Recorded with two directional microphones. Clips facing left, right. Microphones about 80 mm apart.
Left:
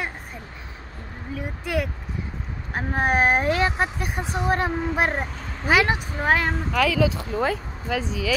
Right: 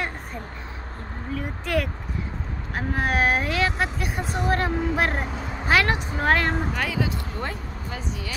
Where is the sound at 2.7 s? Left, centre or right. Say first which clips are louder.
Left 2 dB; left; by 6.6 s centre.